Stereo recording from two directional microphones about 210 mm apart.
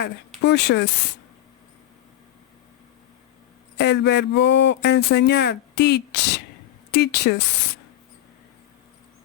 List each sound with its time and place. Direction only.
0.4 s speech: 55° left (ahead or behind)
3.8 s speech: 55° left (ahead or behind)